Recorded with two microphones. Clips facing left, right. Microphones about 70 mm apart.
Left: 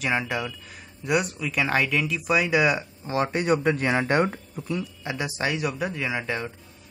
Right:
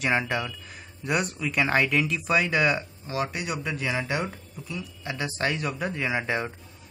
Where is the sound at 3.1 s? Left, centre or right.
Left.